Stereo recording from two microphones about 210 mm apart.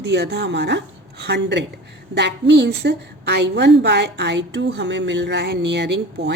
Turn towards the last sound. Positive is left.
turn(degrees=-55)  # may be behind; listen again after turning